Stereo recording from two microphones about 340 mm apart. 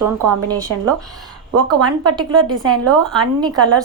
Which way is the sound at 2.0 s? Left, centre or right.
Centre.